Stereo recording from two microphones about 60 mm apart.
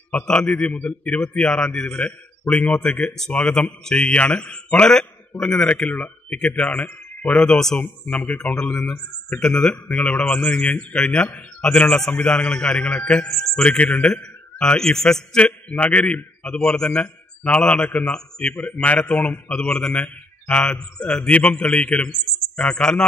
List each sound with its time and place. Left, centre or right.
0.1 s a man's voice: centre
7.4 s a man's voice: centre
8.3 s a man's voice: left
14.6 s a man's voice: centre
15.3 s a man's voice: left
18.5 s a man's voice: left